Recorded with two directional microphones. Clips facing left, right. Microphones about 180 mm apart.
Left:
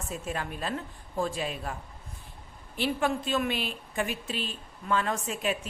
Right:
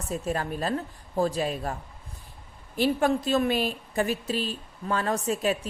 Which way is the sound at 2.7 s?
40° right (ahead or behind).